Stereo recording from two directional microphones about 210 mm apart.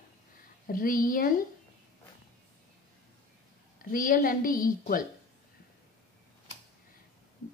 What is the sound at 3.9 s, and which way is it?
A woman's voice, 40° left (ahead or behind).